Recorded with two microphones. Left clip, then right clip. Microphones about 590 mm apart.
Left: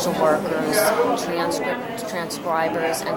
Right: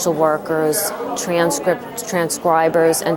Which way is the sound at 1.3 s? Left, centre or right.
Right.